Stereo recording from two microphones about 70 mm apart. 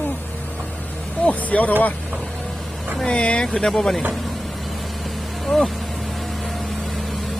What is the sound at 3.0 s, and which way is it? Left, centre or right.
Speech, centre.